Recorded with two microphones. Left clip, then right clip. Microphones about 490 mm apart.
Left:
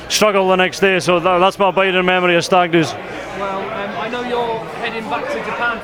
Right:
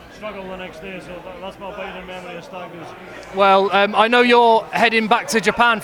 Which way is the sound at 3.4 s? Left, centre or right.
Right.